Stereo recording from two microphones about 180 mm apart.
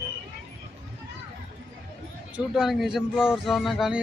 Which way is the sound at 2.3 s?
5° right (ahead or behind).